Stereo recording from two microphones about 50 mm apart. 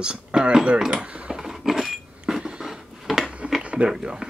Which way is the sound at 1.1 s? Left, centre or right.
Right.